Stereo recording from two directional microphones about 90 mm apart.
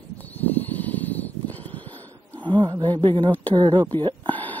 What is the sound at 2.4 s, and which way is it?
Wild animals, 60° right (ahead or behind).